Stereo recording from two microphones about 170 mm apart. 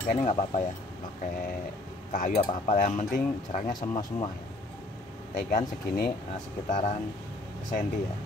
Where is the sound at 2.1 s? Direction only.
55° left (ahead or behind).